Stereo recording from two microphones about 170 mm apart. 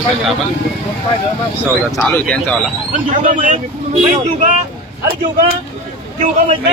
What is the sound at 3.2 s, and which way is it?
Speech, 50° right (ahead or behind).